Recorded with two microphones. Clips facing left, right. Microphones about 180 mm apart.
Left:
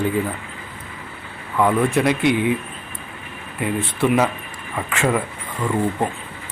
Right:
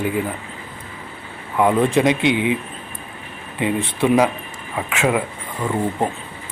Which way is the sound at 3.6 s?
15° right (ahead or behind).